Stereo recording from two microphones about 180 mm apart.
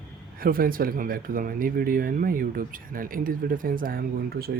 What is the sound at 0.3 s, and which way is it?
Speech, 55° right (ahead or behind).